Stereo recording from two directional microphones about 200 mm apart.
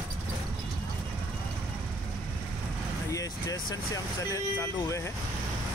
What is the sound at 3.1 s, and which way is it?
Speech, 15° left (ahead or behind).